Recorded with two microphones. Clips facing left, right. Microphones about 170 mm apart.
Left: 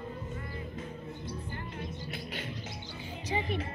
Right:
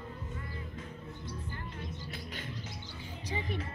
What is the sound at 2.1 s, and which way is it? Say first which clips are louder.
Music: left 3 dB; 75° left (ahead or behind).